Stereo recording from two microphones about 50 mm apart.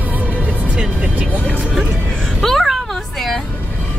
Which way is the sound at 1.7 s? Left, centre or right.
Centre.